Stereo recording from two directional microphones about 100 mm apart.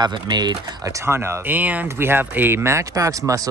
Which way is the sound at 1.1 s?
25° right (ahead or behind).